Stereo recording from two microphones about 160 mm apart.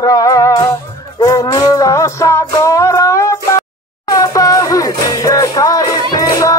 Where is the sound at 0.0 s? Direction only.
20° left (ahead or behind).